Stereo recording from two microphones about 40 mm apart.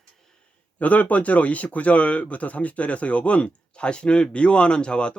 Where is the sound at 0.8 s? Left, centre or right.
Left.